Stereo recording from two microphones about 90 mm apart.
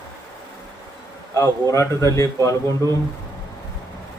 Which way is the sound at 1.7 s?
35° left (ahead or behind).